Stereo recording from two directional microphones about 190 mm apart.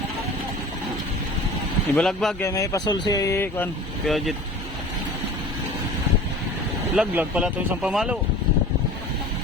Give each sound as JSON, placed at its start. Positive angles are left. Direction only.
{"t": 2.0, "sound": "speech", "side_deg": 0}
{"t": 2.4, "sound": "speech", "side_deg": 15}
{"t": 4.0, "sound": "speech", "side_deg": 0}
{"t": 6.9, "sound": "speech", "side_deg": -5}